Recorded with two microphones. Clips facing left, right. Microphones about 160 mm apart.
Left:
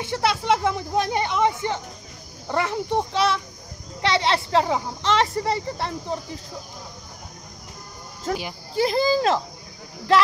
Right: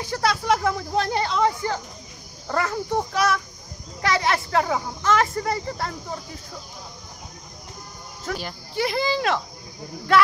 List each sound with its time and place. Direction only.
0.0 s speech: 25° left (ahead or behind)
8.3 s speech: 35° left (ahead or behind)